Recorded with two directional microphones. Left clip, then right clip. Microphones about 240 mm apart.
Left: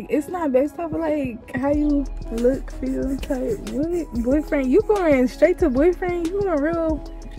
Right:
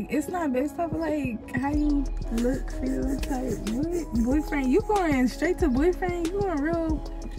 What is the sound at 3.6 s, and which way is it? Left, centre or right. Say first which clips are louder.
Speech: left 5 dB; centre.